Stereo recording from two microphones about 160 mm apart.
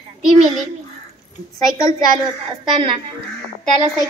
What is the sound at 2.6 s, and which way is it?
Speech, 30° right (ahead or behind).